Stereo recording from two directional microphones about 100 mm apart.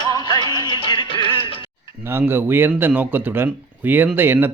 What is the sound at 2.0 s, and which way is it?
Speech, 20° right (ahead or behind).